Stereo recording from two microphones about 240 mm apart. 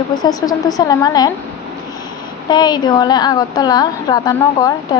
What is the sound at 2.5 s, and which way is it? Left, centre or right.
A woman's voice, centre.